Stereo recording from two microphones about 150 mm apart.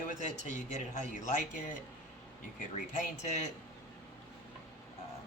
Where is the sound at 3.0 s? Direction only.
50° left (ahead or behind).